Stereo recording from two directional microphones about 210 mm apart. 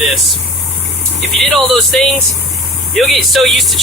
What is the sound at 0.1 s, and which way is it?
Speech, centre (ahead or behind).